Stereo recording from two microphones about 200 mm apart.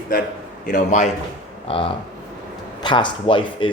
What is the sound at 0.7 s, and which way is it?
Speech, 40° left (ahead or behind).